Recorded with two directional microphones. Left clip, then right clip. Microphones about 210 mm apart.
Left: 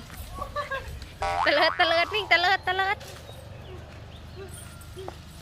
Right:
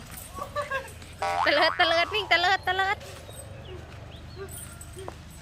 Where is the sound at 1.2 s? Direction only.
Centre (ahead or behind).